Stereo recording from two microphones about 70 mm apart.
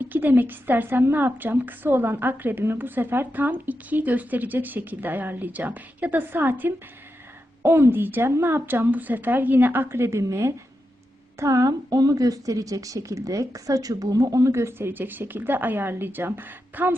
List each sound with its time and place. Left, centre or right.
0.0 s a woman's voice: right